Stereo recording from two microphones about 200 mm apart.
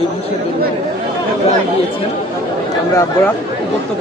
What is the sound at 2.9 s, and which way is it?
Speech, 15° left (ahead or behind).